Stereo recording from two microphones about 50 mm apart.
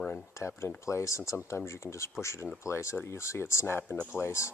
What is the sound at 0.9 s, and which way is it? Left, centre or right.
Speech, left.